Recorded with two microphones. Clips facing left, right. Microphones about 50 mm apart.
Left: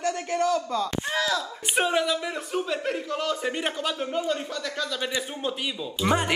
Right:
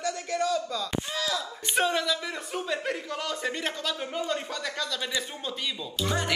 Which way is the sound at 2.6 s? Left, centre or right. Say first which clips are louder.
Left 2 dB; centre.